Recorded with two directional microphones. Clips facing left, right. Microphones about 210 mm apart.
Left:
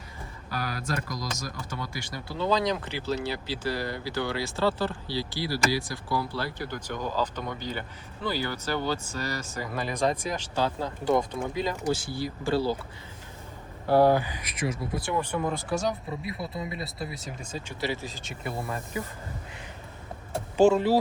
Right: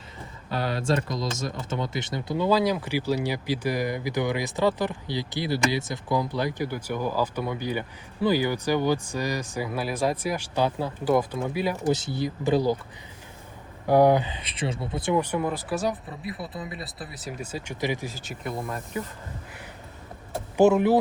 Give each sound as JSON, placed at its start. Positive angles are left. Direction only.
{"t": 0.5, "sound": "speech", "side_deg": -25}
{"t": 2.5, "sound": "speech", "side_deg": -5}
{"t": 11.9, "sound": "speech", "side_deg": -20}
{"t": 13.8, "sound": "speech", "side_deg": -15}
{"t": 20.6, "sound": "speech", "side_deg": -20}